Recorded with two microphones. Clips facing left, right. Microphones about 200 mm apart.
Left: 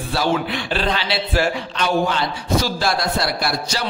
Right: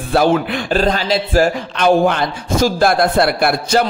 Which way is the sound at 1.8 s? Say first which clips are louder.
Right 7 dB; 55° right (ahead or behind).